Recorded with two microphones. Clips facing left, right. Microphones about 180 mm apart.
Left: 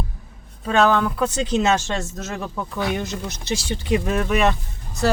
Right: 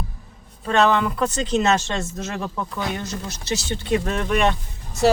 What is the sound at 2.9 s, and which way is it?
Speech, 15° left (ahead or behind).